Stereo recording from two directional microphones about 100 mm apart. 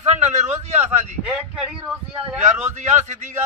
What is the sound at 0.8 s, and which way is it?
Speech, 20° right (ahead or behind).